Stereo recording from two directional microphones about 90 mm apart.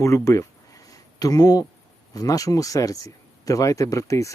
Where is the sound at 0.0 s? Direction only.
35° left (ahead or behind).